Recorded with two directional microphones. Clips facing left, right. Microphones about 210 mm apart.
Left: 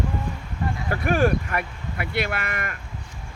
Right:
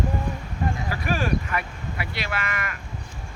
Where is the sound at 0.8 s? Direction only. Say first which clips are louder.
Left 8 dB; 55° left (ahead or behind).